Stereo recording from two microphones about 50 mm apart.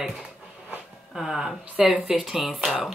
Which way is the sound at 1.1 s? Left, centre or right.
Centre.